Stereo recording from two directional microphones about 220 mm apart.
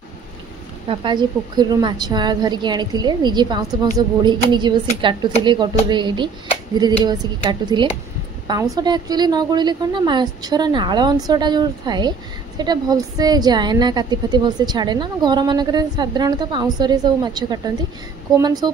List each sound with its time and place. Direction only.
0.8 s a woman's voice: 20° right (ahead or behind)
7.6 s a woman's voice: 20° right (ahead or behind)